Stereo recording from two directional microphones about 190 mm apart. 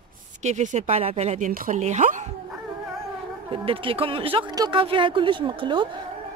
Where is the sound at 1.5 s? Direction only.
45° right (ahead or behind).